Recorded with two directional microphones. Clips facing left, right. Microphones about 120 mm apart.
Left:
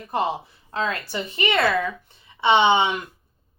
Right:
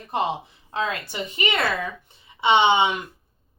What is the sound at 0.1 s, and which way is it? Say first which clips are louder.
A woman's voice: left 1 dB; 20° right (ahead or behind).